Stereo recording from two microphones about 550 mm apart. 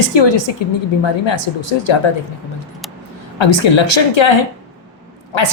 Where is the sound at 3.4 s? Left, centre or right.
Left.